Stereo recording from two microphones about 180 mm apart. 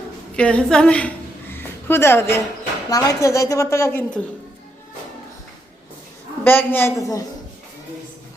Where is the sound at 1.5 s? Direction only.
10° left (ahead or behind).